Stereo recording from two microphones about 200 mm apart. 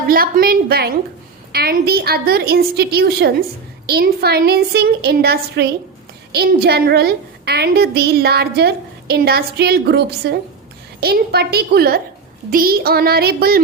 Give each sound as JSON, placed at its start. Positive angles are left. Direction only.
{"t": 0.1, "sound": "a woman's voice", "side_deg": -45}